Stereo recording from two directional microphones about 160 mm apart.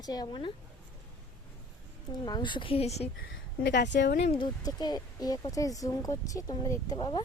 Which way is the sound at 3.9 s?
90° left.